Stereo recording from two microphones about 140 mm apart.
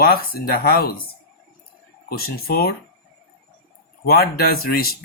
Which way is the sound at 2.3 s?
90° left.